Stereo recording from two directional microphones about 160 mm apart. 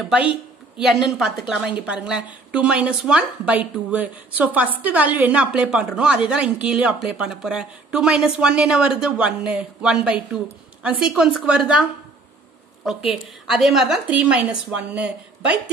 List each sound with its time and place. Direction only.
0.0 s a woman's voice: 5° right (ahead or behind)